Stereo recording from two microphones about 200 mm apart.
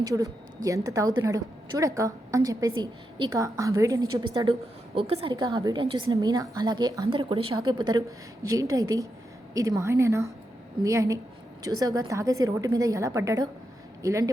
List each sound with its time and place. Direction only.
0.0 s a woman's voice: 15° right (ahead or behind)